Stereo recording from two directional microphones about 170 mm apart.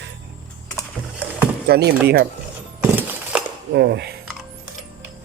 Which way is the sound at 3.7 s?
80° right.